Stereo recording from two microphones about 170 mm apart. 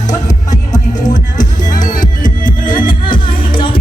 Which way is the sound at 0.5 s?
20° left (ahead or behind).